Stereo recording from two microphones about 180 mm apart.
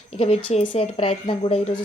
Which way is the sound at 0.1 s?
35° left (ahead or behind).